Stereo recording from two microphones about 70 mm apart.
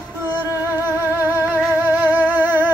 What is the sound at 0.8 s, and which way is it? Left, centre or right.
Music, right.